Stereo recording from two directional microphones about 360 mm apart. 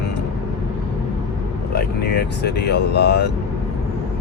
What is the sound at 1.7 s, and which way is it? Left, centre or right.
Speech, left.